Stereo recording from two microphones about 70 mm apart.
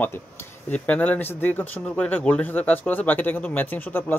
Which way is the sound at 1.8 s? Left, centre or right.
Centre.